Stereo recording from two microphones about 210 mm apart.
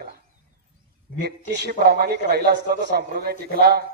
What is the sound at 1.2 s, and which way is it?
A man's voice, 50° right (ahead or behind).